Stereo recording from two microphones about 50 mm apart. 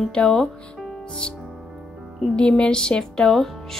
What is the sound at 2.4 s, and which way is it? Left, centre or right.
Speech, centre.